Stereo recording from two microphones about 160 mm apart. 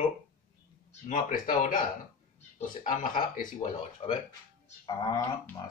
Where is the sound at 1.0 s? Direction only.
55° left (ahead or behind).